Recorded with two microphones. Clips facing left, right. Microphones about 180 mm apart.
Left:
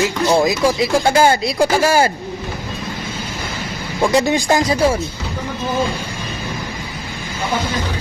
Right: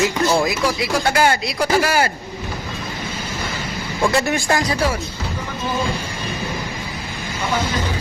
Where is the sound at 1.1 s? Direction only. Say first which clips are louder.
Left 2 dB; 25° left (ahead or behind).